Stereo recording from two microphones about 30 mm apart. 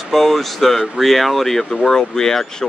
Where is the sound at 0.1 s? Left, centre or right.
Centre.